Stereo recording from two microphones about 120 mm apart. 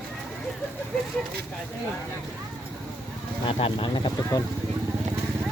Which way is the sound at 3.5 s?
50° left (ahead or behind).